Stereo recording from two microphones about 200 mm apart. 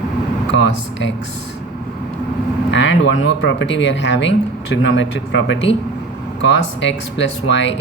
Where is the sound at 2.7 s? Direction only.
65° left (ahead or behind).